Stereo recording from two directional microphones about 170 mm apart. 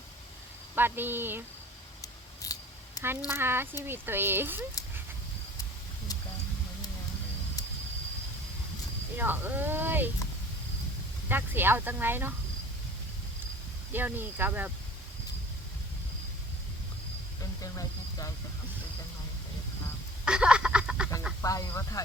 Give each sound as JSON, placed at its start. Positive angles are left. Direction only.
{"t": 0.8, "sound": "speech", "side_deg": -10}
{"t": 2.0, "sound": "scissors", "side_deg": 20}
{"t": 3.2, "sound": "speech", "side_deg": -15}
{"t": 9.1, "sound": "speech", "side_deg": -10}
{"t": 11.3, "sound": "speech", "side_deg": -10}
{"t": 13.9, "sound": "speech", "side_deg": -10}
{"t": 17.4, "sound": "speech", "side_deg": 20}
{"t": 20.2, "sound": "duck", "side_deg": -5}
{"t": 21.4, "sound": "speech", "side_deg": 20}